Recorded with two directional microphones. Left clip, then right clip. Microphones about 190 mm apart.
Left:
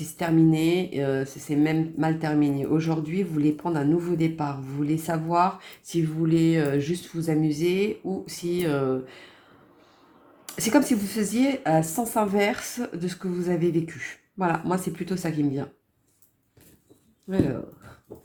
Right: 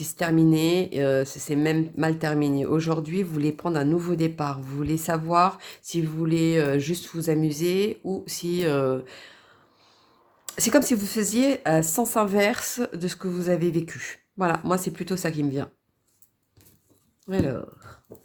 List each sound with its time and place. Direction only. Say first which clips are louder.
0.0 s speech: even; 40° right (ahead or behind)
10.4 s speech: right 1 dB; 40° right (ahead or behind)
17.2 s speech: even; 35° right (ahead or behind)